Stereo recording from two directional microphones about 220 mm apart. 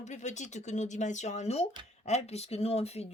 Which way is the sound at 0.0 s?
30° left (ahead or behind).